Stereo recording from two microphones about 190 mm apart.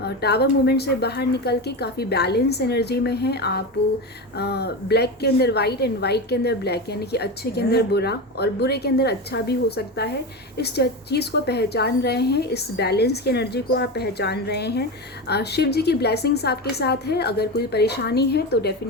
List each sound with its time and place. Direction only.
0.0 s a woman's voice: 60° left (ahead or behind)